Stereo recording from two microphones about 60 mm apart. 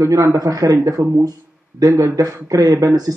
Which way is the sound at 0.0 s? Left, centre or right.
Right.